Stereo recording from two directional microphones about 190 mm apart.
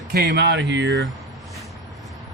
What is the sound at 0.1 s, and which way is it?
Speech, 55° right (ahead or behind).